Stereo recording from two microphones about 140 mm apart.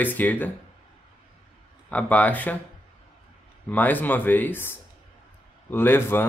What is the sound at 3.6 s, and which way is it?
Speech, 10° left (ahead or behind).